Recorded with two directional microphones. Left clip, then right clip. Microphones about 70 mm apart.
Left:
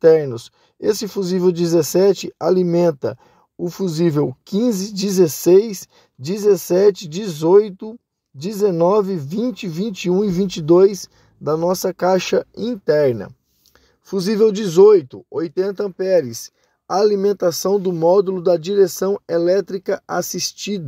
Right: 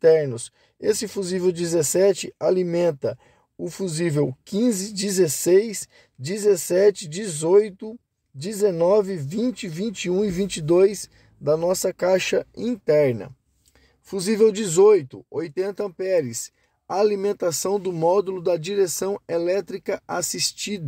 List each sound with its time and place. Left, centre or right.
1.0 s speech: left
3.6 s speech: left
14.0 s speech: left
16.1 s speech: left